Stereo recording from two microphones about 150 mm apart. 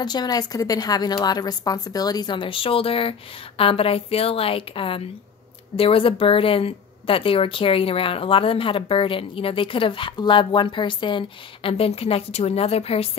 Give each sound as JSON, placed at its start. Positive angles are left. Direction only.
{"t": 0.0, "sound": "a woman's voice", "side_deg": 30}